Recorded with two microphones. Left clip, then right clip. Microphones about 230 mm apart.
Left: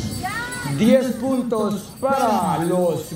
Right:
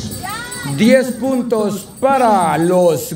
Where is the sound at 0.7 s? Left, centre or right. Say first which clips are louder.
Right 5 dB; right.